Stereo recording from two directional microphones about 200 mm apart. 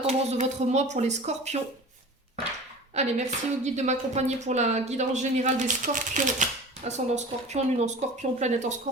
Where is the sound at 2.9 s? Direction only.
35° right (ahead or behind).